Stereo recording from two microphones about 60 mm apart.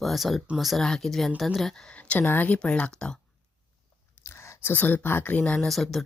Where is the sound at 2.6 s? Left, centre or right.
Centre.